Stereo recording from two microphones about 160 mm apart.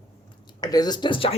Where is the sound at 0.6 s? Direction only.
25° left (ahead or behind).